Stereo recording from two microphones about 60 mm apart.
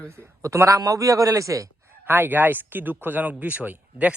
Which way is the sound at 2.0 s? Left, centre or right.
Right.